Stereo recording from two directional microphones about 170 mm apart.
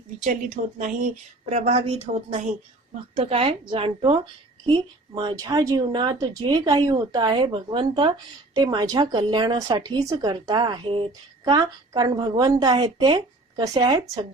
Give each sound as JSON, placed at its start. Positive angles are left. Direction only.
{"t": 0.3, "sound": "a woman's voice", "side_deg": -45}